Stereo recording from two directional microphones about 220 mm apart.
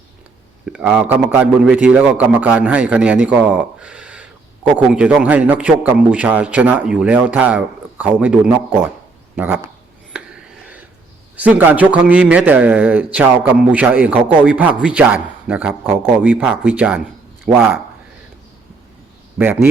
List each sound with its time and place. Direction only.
0.6 s speech: 5° right (ahead or behind)
11.3 s speech: 5° right (ahead or behind)